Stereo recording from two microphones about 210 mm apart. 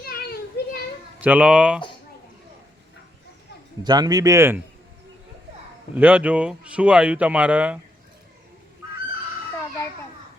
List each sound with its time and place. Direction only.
0.0 s children playing: 45° left (ahead or behind)
1.2 s speech: 5° right (ahead or behind)
3.8 s speech: 20° right (ahead or behind)
5.9 s speech: 5° right (ahead or behind)